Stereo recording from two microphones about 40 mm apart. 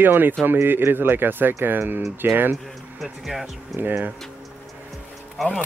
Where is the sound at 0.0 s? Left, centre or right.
Right.